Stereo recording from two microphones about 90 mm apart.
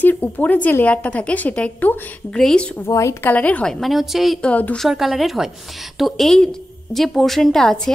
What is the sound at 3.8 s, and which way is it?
Speech, centre (ahead or behind).